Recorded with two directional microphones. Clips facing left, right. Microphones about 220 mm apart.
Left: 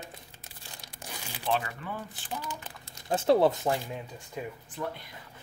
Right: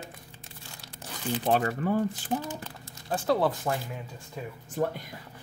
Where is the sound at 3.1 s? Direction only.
25° left (ahead or behind).